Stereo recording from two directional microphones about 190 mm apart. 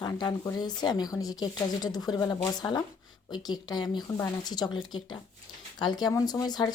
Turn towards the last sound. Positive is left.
turn(degrees=20)  # may be behind; listen again after turning